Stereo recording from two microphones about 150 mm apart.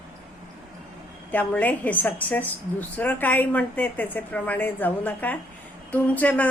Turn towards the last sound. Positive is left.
turn(degrees=10)  # may be behind; listen again after turning